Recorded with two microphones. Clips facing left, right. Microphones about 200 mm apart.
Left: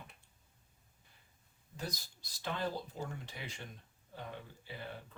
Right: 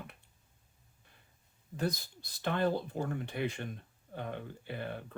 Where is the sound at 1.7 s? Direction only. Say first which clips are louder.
Right 9 dB; 60° right (ahead or behind).